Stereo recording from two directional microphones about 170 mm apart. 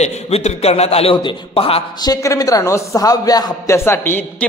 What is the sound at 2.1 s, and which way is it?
A man's voice, 20° left (ahead or behind).